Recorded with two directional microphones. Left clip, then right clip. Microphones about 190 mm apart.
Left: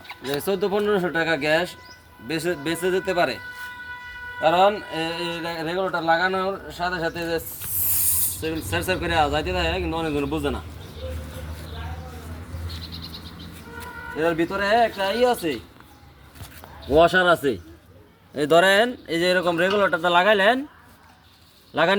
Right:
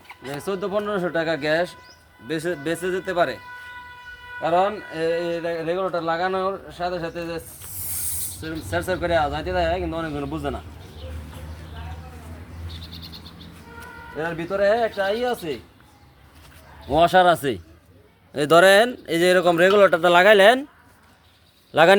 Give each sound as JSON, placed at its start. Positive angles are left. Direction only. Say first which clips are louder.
{"t": 0.3, "sound": "speech", "louder": "left 4 dB", "side_deg": 0}
{"t": 14.2, "sound": "speech", "louder": "even", "side_deg": -5}
{"t": 16.9, "sound": "speech", "louder": "right 1 dB", "side_deg": -45}
{"t": 18.3, "sound": "speech", "louder": "right 3 dB", "side_deg": -50}
{"t": 21.7, "sound": "speech", "louder": "right 6 dB", "side_deg": -70}